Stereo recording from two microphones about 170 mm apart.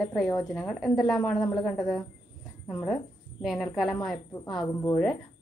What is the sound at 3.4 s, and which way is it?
Speech, centre (ahead or behind).